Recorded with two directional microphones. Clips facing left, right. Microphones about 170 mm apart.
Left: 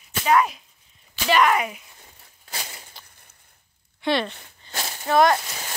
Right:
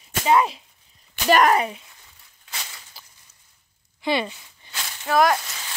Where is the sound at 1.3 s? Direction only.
40° right (ahead or behind).